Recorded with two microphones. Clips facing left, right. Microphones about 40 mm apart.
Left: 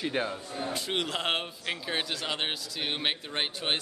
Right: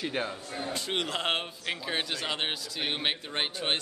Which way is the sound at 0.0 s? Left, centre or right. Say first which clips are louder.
Left 2 dB; centre.